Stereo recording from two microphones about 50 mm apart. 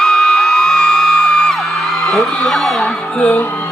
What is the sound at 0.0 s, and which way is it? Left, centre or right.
Music, centre.